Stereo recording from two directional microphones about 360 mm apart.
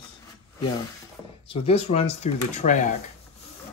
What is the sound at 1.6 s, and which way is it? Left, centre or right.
Speech, centre.